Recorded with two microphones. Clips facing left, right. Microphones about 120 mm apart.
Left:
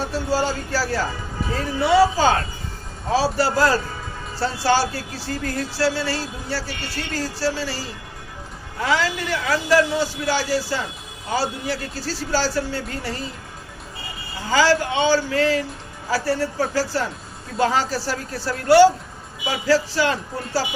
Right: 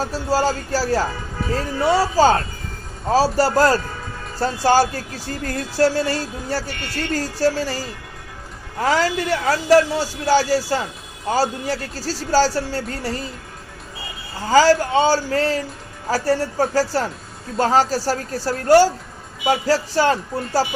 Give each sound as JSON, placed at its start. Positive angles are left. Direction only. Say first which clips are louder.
{"t": 0.0, "sound": "speech", "louder": "right 2 dB", "side_deg": -40}
{"t": 14.4, "sound": "speech", "louder": "right 4 dB", "side_deg": -40}